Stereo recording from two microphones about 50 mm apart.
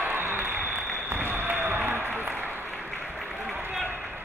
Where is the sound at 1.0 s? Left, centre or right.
Right.